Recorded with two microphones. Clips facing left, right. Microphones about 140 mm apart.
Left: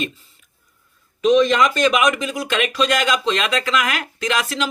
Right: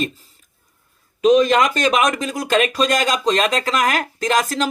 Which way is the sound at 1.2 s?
40° right (ahead or behind).